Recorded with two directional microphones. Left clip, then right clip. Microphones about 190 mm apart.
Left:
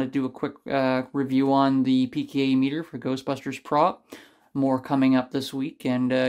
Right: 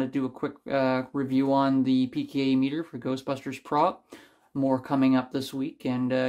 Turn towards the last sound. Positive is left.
turn(degrees=25)  # may be behind; listen again after turning